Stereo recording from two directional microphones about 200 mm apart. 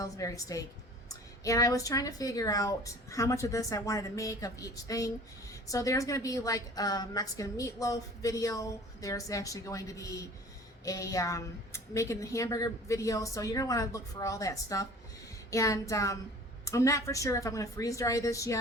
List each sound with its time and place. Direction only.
0.0 s a woman's voice: 15° left (ahead or behind)